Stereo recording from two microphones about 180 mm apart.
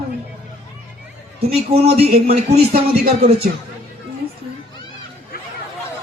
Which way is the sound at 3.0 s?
55° right (ahead or behind).